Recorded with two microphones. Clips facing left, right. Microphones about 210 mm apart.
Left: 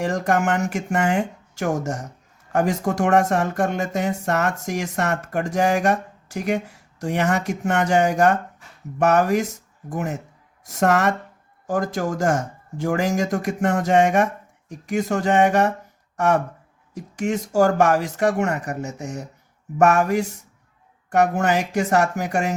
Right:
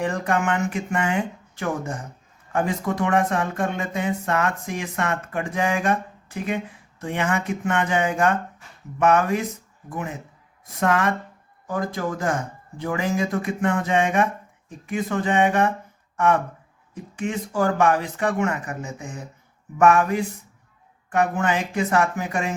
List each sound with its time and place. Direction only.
0.0 s speech: 40° left (ahead or behind)